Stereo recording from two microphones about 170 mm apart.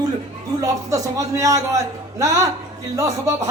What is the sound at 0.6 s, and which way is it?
A man's voice, 20° right (ahead or behind).